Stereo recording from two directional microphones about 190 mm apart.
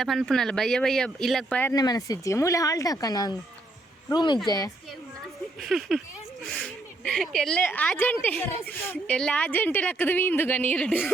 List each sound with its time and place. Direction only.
0.0 s speech: centre (ahead or behind)
1.7 s speech: 20° left (ahead or behind)
5.5 s speech: centre (ahead or behind)